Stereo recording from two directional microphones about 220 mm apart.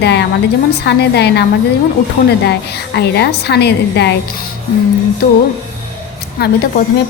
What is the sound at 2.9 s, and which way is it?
A woman's voice, 50° left (ahead or behind).